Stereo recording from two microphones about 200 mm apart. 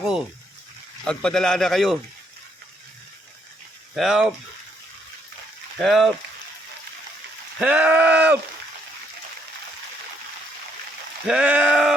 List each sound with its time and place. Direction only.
1.0 s speech: 5° left (ahead or behind)
3.9 s speech: centre (ahead or behind)
5.8 s speech: centre (ahead or behind)
7.6 s speech: 5° right (ahead or behind)
11.3 s speech: 5° right (ahead or behind)